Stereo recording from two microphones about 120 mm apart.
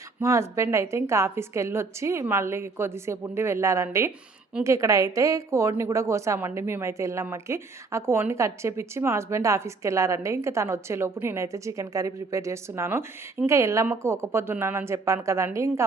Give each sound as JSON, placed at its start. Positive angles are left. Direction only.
{"t": 0.2, "sound": "a woman's voice", "side_deg": -25}